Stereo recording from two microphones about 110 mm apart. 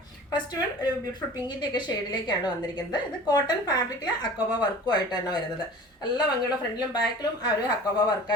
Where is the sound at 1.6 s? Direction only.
45° left (ahead or behind).